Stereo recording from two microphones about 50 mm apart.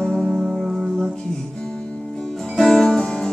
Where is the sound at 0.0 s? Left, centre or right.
Centre.